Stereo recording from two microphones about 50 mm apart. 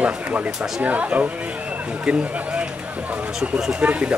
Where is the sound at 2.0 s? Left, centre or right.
Right.